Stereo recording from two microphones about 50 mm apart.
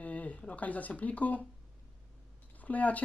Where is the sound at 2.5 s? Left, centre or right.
Left.